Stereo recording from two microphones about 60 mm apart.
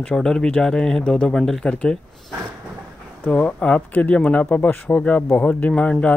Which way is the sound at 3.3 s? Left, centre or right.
Centre.